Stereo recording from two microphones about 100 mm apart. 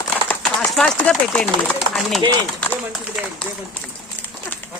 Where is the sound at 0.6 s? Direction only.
10° left (ahead or behind).